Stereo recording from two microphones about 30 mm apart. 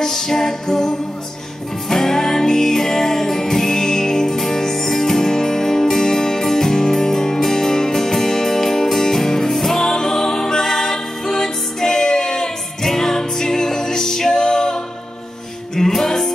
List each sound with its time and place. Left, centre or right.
0.0 s music: centre